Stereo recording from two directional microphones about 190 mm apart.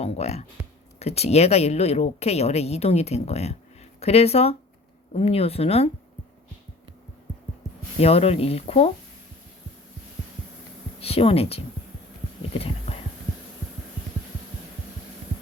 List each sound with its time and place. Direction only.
0.0 s speech: 35° left (ahead or behind)
7.9 s speech: 30° left (ahead or behind)
11.0 s speech: 30° left (ahead or behind)
12.5 s a sound: 30° left (ahead or behind)